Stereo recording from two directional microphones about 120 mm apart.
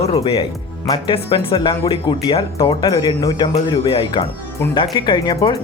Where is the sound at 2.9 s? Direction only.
35° left (ahead or behind).